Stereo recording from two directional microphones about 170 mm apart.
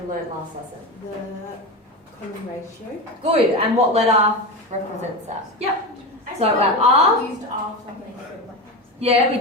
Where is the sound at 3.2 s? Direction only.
35° right (ahead or behind).